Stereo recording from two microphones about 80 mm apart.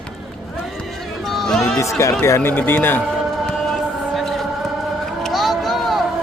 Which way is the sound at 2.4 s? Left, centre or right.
Left.